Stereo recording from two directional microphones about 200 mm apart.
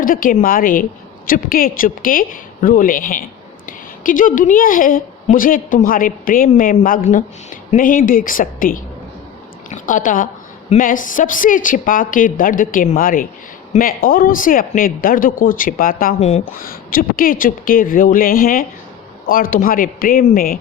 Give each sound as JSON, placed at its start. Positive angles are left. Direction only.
{"t": 0.0, "sound": "a man's voice", "side_deg": 45}